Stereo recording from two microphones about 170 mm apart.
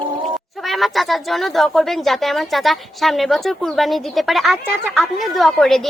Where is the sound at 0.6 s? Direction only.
Centre (ahead or behind).